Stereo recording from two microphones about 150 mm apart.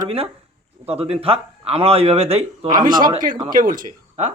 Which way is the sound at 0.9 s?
40° right (ahead or behind).